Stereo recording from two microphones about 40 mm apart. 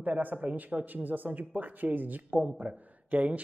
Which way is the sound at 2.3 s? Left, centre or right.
Right.